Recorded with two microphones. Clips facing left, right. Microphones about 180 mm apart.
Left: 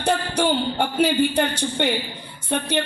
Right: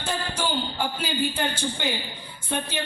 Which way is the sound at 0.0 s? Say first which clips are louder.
Left 8 dB; 70° left (ahead or behind).